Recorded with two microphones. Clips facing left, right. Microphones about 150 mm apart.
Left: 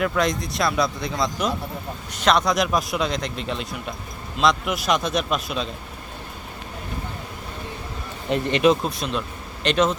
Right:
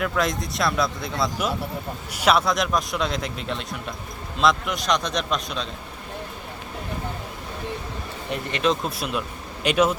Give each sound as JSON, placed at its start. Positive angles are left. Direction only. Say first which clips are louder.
{"t": 0.0, "sound": "a man's voice", "louder": "left 2 dB", "side_deg": 0}
{"t": 8.3, "sound": "speech", "louder": "left 7 dB", "side_deg": 20}
{"t": 8.6, "sound": "a man's voice", "louder": "left 4 dB", "side_deg": 5}
{"t": 9.0, "sound": "a man's voice", "louder": "left 1 dB", "side_deg": -5}